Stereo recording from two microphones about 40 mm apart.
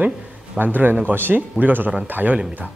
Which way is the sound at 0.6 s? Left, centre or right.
Right.